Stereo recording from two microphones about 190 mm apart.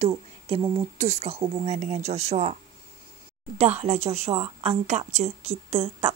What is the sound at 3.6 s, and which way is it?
Speech, 35° right (ahead or behind).